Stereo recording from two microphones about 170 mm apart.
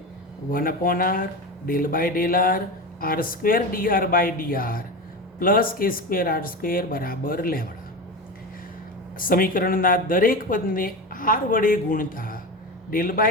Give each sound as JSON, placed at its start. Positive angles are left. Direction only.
{"t": 0.5, "sound": "speech", "side_deg": 55}
{"t": 9.1, "sound": "speech", "side_deg": 55}